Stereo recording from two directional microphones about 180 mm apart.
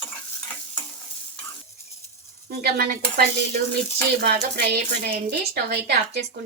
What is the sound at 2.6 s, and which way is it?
Speech, 55° right (ahead or behind).